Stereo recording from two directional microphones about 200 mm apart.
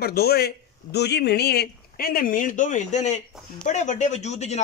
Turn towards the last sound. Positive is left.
turn(degrees=35)  # may be behind; listen again after turning